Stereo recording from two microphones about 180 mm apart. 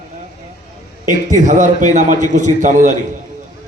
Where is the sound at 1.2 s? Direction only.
45° right (ahead or behind).